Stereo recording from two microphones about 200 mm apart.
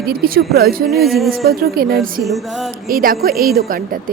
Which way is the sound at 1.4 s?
50° right (ahead or behind).